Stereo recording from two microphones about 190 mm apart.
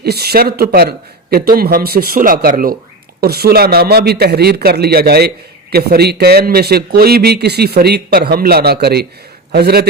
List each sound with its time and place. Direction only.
0.0 s speech: 55° right (ahead or behind)